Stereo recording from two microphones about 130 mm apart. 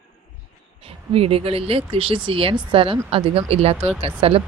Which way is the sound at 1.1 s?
50° right (ahead or behind).